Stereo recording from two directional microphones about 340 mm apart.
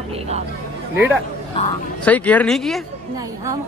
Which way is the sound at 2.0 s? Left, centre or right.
Centre.